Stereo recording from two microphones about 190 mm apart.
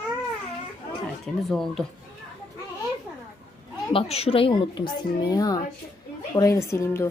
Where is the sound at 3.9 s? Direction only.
30° left (ahead or behind).